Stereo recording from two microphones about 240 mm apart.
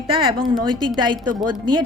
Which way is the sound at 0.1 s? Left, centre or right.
Right.